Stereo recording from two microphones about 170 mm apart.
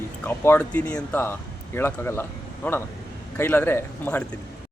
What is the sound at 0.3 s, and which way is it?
Speech, 10° left (ahead or behind).